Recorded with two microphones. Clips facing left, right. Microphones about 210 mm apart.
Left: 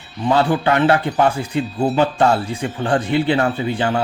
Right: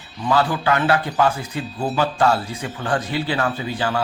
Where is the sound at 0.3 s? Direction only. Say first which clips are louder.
Left 3 dB; 25° left (ahead or behind).